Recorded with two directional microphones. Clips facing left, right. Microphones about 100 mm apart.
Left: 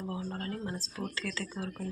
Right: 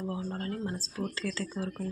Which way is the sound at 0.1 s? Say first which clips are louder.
Right 2 dB; 30° right (ahead or behind).